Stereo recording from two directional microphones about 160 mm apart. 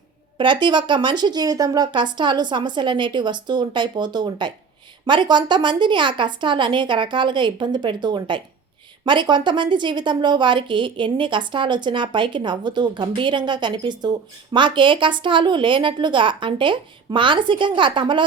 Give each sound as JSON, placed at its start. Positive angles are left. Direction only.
{"t": 0.3, "sound": "a woman's voice", "side_deg": -30}